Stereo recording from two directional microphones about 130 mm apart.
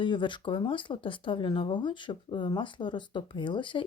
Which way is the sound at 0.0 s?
40° left (ahead or behind).